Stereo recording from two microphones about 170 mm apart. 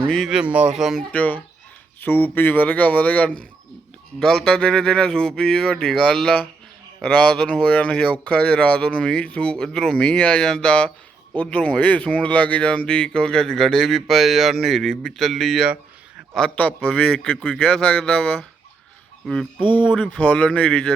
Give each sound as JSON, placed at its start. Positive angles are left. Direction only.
{"t": 0.1, "sound": "speech", "side_deg": 0}
{"t": 1.1, "sound": "speech", "side_deg": 10}
{"t": 19.5, "sound": "speech", "side_deg": -30}
{"t": 19.9, "sound": "speech", "side_deg": 5}